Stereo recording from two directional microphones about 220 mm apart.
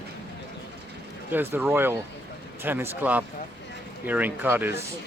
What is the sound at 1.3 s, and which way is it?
Speech, 10° right (ahead or behind).